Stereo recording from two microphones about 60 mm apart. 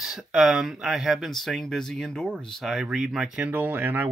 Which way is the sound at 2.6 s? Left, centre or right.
Centre.